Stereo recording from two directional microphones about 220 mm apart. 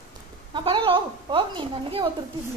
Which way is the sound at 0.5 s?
25° right (ahead or behind).